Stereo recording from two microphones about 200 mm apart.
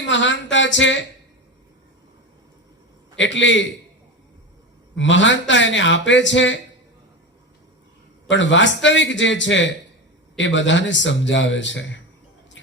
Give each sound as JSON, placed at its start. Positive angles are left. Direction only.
{"t": 0.1, "sound": "a man's voice", "side_deg": 65}
{"t": 3.2, "sound": "a man's voice", "side_deg": 65}
{"t": 4.9, "sound": "a man's voice", "side_deg": 65}
{"t": 8.3, "sound": "a man's voice", "side_deg": 65}
{"t": 12.6, "sound": "music", "side_deg": 65}